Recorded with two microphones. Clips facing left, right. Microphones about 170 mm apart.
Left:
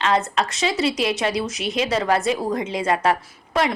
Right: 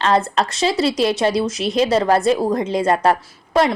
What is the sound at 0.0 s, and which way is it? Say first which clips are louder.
A woman's voice: right 3 dB; 35° right (ahead or behind).